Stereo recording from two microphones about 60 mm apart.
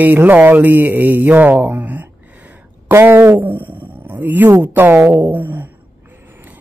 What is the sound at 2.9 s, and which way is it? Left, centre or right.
Speech, right.